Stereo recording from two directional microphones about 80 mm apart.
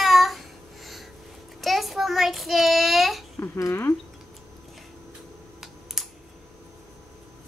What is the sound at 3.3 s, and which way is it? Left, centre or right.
Speech, left.